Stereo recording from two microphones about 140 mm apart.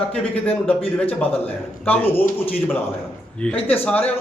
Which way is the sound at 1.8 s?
15° left (ahead or behind).